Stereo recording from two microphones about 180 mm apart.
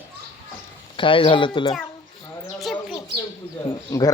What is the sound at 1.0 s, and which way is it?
Speech, 30° left (ahead or behind).